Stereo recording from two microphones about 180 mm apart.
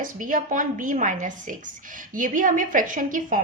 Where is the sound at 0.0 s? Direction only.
50° right (ahead or behind).